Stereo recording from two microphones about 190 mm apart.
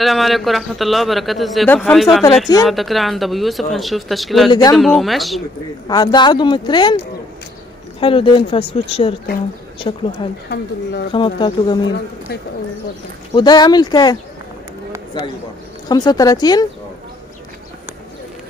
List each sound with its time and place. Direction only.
0.0 s a man's voice: centre (ahead or behind)
4.5 s speech: 20° left (ahead or behind)
4.7 s a man's voice: centre (ahead or behind)
5.9 s speech: 25° left (ahead or behind)
8.0 s speech: 30° left (ahead or behind)
10.5 s speech: 60° left (ahead or behind)
11.1 s speech: 25° left (ahead or behind)
13.3 s speech: 20° left (ahead or behind)
15.2 s speech: 25° left (ahead or behind)